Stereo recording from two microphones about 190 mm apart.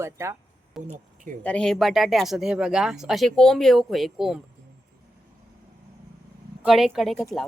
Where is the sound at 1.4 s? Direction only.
5° left (ahead or behind).